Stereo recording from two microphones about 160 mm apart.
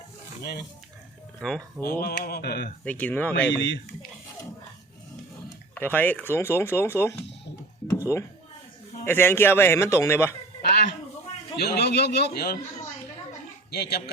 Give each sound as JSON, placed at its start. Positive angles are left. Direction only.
{"t": 1.4, "sound": "speech", "side_deg": 5}
{"t": 1.8, "sound": "speech", "side_deg": 70}
{"t": 2.8, "sound": "speech", "side_deg": 10}
{"t": 5.7, "sound": "speech", "side_deg": 10}
{"t": 9.0, "sound": "speech", "side_deg": 15}
{"t": 10.6, "sound": "a sound", "side_deg": 90}
{"t": 11.5, "sound": "a man's voice", "side_deg": 90}
{"t": 13.7, "sound": "a man's voice", "side_deg": 90}